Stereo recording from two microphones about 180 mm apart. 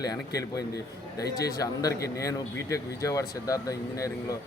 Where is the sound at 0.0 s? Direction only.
20° left (ahead or behind).